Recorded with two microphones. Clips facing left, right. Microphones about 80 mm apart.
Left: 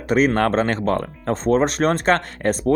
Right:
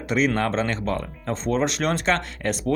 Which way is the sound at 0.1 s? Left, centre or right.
Left.